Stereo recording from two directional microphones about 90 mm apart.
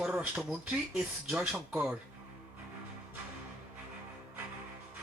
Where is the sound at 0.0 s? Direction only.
10° right (ahead or behind).